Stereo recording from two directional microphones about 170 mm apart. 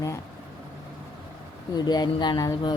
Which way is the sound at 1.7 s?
25° left (ahead or behind).